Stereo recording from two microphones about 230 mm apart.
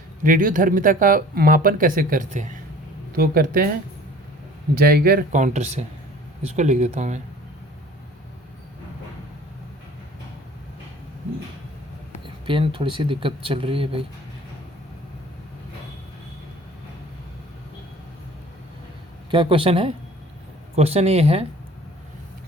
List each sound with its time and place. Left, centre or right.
0.2 s speech: right
4.7 s speech: right
12.2 s speech: right
19.3 s speech: right